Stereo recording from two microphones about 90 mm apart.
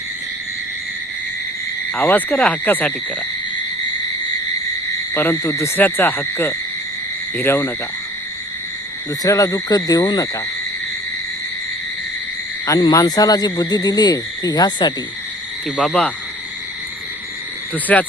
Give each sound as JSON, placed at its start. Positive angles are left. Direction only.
{"t": 2.0, "sound": "speech", "side_deg": 20}
{"t": 5.1, "sound": "speech", "side_deg": 25}
{"t": 9.2, "sound": "speech", "side_deg": 40}
{"t": 12.9, "sound": "speech", "side_deg": 40}
{"t": 15.8, "sound": "hoot", "side_deg": 10}
{"t": 17.9, "sound": "hoot", "side_deg": 15}